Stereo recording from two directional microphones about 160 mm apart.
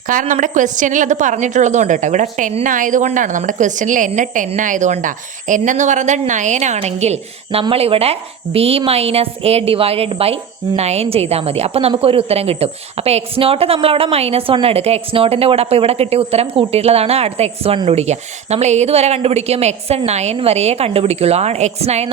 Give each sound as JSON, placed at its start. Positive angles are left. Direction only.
{"t": 0.1, "sound": "a woman's voice", "side_deg": -55}